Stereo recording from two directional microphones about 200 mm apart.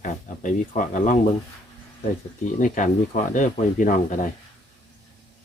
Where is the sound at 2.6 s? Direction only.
40° left (ahead or behind).